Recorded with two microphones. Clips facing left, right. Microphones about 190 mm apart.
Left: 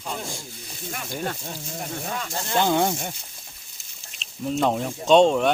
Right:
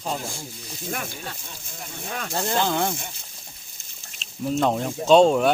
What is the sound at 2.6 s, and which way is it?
Speech, 20° left (ahead or behind).